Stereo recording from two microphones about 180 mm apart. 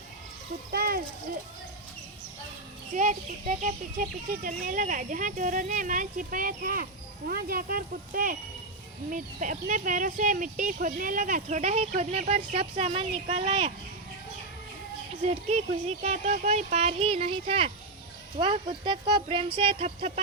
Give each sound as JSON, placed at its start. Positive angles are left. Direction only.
{"t": 0.7, "sound": "speech", "side_deg": -55}
{"t": 2.9, "sound": "a child's voice", "side_deg": -45}
{"t": 15.3, "sound": "speech", "side_deg": -35}